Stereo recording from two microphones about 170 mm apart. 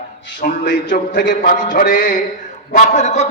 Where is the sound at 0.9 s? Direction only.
50° left (ahead or behind).